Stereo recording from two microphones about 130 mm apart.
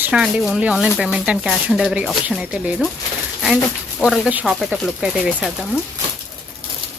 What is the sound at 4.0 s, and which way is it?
Speech, centre (ahead or behind).